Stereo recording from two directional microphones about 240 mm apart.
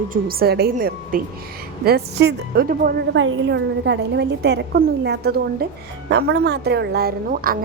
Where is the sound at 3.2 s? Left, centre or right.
Right.